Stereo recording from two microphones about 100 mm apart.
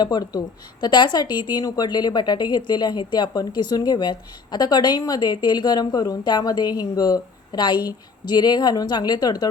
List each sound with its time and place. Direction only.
0.0 s speech: 40° left (ahead or behind)